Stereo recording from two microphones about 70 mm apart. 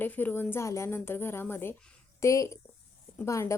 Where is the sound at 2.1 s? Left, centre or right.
Left.